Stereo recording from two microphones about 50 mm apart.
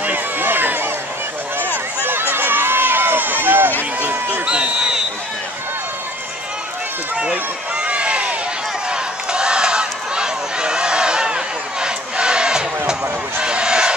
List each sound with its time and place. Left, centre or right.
0.0 s run: right
2.0 s run: right
4.0 s a sound: right
4.5 s a sound: centre
7.2 s run: centre
8.9 s crowd: centre